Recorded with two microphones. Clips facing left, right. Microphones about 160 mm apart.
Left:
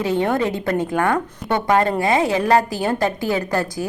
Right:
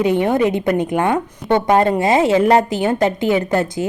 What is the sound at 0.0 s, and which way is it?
A woman's voice, 15° right (ahead or behind).